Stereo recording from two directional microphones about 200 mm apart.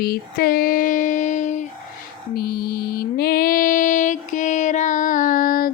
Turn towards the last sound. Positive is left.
turn(degrees=45)  # may be behind; listen again after turning